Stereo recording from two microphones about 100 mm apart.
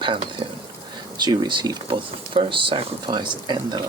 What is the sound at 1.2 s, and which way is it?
Speech, 45° right (ahead or behind).